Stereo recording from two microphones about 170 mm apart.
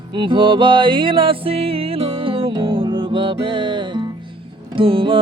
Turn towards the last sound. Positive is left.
turn(degrees=-30)  # may be behind; listen again after turning